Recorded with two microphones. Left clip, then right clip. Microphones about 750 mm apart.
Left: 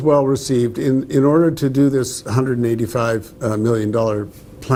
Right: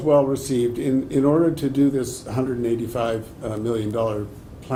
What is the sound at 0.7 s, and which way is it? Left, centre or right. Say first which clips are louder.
Speech: left 4 dB; left.